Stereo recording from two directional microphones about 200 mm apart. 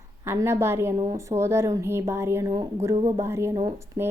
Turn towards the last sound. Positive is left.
turn(degrees=-15)  # may be behind; listen again after turning